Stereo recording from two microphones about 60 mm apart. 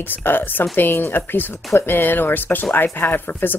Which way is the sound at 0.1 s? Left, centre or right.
Left.